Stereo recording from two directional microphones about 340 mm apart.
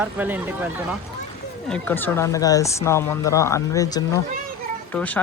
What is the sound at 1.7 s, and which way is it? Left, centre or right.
Speech, centre.